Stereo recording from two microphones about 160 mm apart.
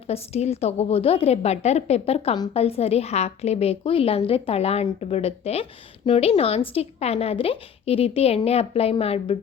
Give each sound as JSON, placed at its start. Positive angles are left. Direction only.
{"t": 0.1, "sound": "a woman's voice", "side_deg": 40}